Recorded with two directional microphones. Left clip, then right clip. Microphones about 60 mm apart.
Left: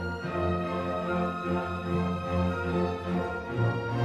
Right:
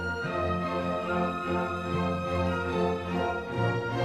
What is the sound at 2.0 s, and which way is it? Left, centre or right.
Music, centre.